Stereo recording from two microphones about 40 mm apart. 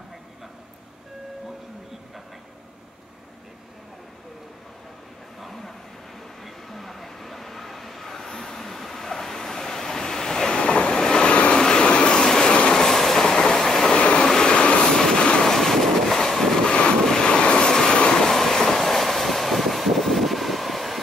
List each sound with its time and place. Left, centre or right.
5.4 s vehicle: centre
12.7 s train: centre
13.6 s train: centre
14.2 s vehicle: centre
15.4 s vehicle: centre
16.6 s waves: left
18.3 s train: centre